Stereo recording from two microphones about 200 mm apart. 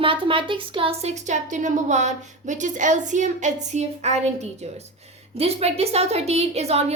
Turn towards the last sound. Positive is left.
turn(degrees=-30)  # may be behind; listen again after turning